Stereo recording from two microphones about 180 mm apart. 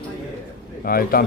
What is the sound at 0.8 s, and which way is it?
Speech, 55° left (ahead or behind).